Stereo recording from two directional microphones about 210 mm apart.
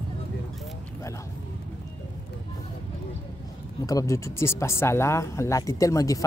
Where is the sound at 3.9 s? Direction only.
15° left (ahead or behind).